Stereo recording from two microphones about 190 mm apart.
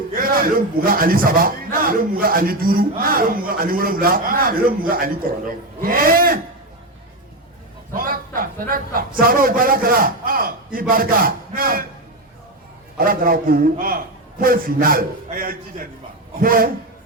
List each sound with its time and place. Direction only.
0.1 s a man's voice: 50° right (ahead or behind)
7.9 s a man's voice: 50° right (ahead or behind)
13.0 s a man's voice: 50° right (ahead or behind)